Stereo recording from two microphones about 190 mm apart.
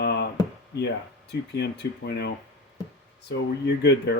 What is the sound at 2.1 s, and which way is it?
Speech, 60° left (ahead or behind).